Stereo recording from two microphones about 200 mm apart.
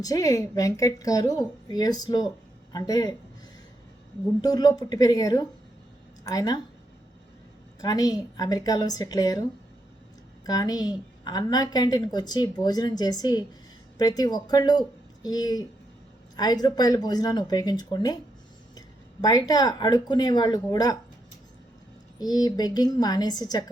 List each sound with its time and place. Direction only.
0.0 s a woman's voice: 15° left (ahead or behind)
4.4 s a woman's voice: 20° left (ahead or behind)
7.8 s a woman's voice: 20° left (ahead or behind)
10.4 s a woman's voice: 20° left (ahead or behind)
19.2 s a woman's voice: 20° left (ahead or behind)
22.2 s a woman's voice: 20° left (ahead or behind)